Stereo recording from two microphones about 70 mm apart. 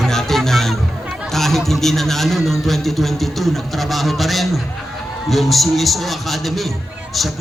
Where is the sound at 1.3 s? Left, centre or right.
Centre.